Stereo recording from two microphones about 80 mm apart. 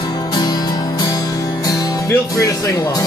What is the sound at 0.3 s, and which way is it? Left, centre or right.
Music, left.